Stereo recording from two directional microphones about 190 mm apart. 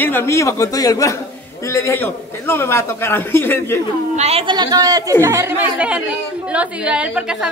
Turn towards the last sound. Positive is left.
turn(degrees=-5)  # may be behind; listen again after turning